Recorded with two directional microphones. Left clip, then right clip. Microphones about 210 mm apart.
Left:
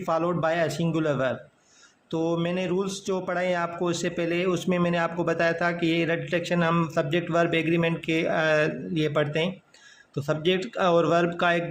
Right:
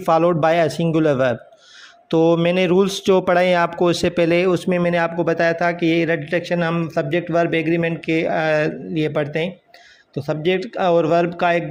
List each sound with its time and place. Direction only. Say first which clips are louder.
0.0 s a man's voice: right 9 dB; 30° right (ahead or behind)